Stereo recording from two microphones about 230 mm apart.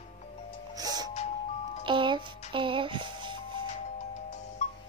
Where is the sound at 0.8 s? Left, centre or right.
Centre.